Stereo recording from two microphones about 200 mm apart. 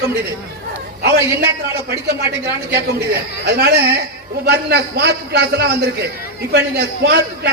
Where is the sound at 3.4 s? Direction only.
55° right (ahead or behind).